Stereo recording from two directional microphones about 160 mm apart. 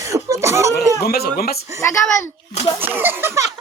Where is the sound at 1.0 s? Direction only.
75° left (ahead or behind).